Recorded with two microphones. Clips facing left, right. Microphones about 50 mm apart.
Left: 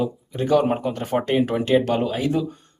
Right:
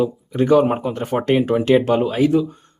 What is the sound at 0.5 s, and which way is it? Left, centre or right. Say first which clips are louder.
Speech: right 3 dB; centre.